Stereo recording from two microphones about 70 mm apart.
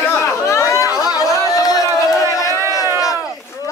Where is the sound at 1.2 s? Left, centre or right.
Left.